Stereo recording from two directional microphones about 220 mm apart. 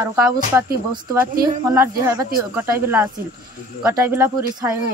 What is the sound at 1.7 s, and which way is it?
Female singing, 15° right (ahead or behind).